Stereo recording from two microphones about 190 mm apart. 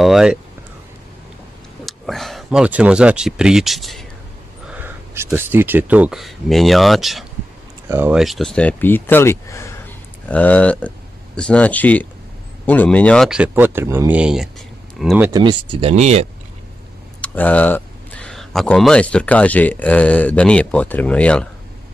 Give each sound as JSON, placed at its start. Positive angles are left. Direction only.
{"t": 0.0, "sound": "speech", "side_deg": -5}
{"t": 1.9, "sound": "speech", "side_deg": 0}
{"t": 4.7, "sound": "speech", "side_deg": -10}
{"t": 15.2, "sound": "speech", "side_deg": -20}
{"t": 17.2, "sound": "speech", "side_deg": 10}